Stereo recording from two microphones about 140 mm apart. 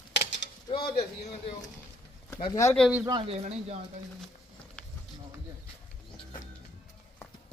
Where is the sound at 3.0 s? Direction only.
30° right (ahead or behind).